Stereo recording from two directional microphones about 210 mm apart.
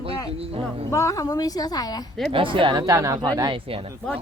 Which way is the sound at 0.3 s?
30° right (ahead or behind).